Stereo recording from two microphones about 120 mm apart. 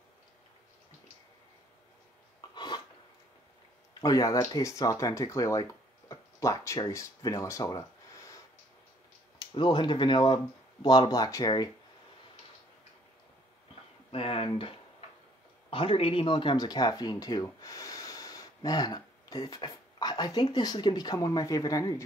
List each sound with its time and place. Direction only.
2.5 s filing: 40° left (ahead or behind)
4.0 s speech: 30° left (ahead or behind)
9.5 s speech: 40° left (ahead or behind)
14.1 s tick-tock: 50° left (ahead or behind)
15.7 s speech: 50° left (ahead or behind); by 22.0 s 30° left (ahead or behind)